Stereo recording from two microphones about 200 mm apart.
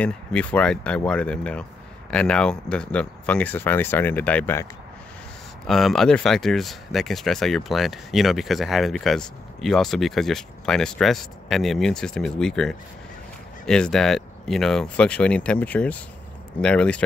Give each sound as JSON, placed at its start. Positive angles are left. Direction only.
{"t": 0.0, "sound": "speech", "side_deg": 5}
{"t": 5.7, "sound": "speech", "side_deg": 0}